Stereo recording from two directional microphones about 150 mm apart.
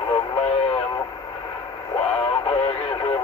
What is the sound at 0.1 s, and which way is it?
Radio, 35° left (ahead or behind).